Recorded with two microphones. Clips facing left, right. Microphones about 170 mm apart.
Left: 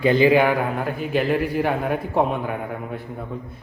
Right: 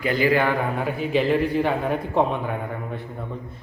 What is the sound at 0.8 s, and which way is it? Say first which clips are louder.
A man's voice: even; centre (ahead or behind).